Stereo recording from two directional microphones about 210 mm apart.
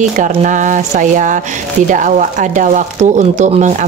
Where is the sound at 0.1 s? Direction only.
35° right (ahead or behind).